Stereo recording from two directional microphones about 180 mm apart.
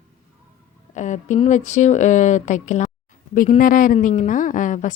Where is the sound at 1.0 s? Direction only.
45° left (ahead or behind).